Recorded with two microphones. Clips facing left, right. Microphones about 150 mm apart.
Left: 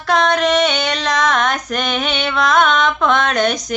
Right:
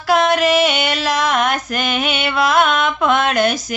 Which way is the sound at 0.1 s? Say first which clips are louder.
Right 1 dB; 5° right (ahead or behind).